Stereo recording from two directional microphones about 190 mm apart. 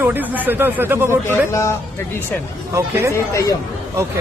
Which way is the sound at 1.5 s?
15° left (ahead or behind).